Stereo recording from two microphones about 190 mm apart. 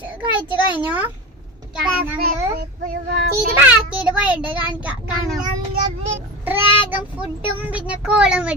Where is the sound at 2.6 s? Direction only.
50° right (ahead or behind).